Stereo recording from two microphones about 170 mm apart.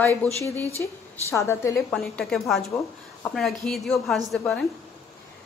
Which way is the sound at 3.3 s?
Centre (ahead or behind).